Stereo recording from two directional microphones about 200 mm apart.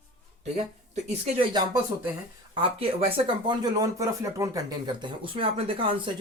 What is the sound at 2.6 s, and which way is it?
Speech, 30° right (ahead or behind).